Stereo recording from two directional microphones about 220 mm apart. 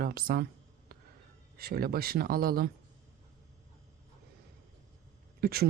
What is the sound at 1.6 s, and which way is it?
Speech, 45° right (ahead or behind).